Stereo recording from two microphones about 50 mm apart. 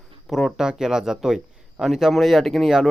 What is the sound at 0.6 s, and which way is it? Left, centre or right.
A man's voice, centre.